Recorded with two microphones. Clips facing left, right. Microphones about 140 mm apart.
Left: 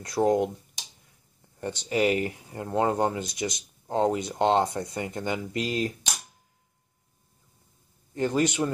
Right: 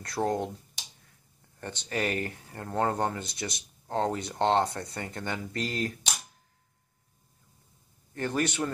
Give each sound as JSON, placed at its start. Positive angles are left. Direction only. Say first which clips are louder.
{"t": 0.0, "sound": "speech", "louder": "left 6 dB", "side_deg": 15}
{"t": 1.6, "sound": "speech", "louder": "left 7 dB", "side_deg": 15}
{"t": 8.1, "sound": "speech", "louder": "left 5 dB", "side_deg": 15}